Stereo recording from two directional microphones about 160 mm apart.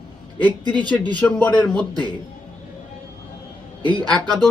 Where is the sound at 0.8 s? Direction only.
10° left (ahead or behind).